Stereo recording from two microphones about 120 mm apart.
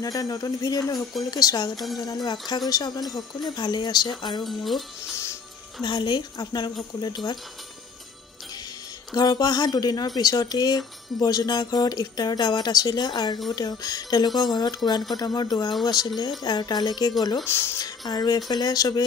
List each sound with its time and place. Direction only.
0.0 s speech: 30° left (ahead or behind)
4.5 s speech: centre (ahead or behind)
5.2 s music: 25° left (ahead or behind)
5.9 s speech: 40° left (ahead or behind)
9.1 s speech: 35° left (ahead or behind)
17.5 s speech: 20° left (ahead or behind)
17.8 s speech: 35° left (ahead or behind)